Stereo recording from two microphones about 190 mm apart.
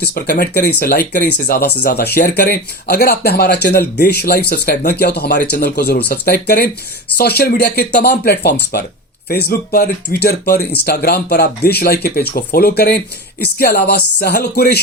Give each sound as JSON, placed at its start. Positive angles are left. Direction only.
{"t": 0.1, "sound": "speech", "side_deg": 55}